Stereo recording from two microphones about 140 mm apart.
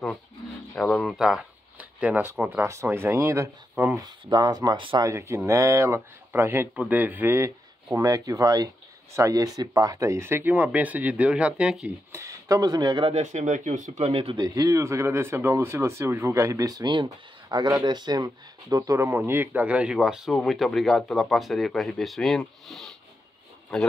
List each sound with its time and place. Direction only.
0.7 s speech: 5° left (ahead or behind); by 5.0 s 35° right (ahead or behind)
5.0 s speech: 20° right (ahead or behind)
12.1 s speech: 20° right (ahead or behind)
13.1 s speech: 55° right (ahead or behind)
14.4 s speech: 25° right (ahead or behind); by 23.9 s 5° left (ahead or behind)